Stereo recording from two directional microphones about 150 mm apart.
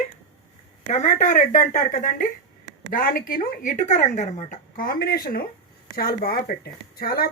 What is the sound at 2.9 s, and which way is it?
Speech, 70° left (ahead or behind).